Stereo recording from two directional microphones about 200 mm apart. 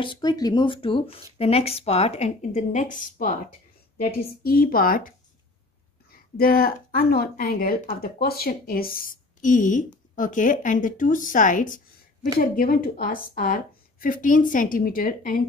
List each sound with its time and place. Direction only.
0.0 s speech: 20° left (ahead or behind); by 3.3 s 40° left (ahead or behind)
4.4 s speech: 45° left (ahead or behind)
6.3 s speech: 50° left (ahead or behind)